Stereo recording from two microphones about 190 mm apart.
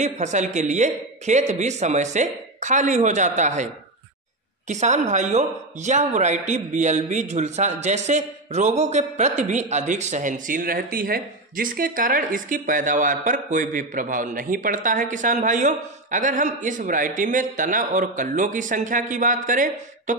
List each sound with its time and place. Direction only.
0.0 s speech: 40° right (ahead or behind)